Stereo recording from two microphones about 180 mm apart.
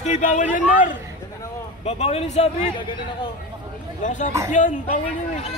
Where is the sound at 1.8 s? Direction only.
35° left (ahead or behind).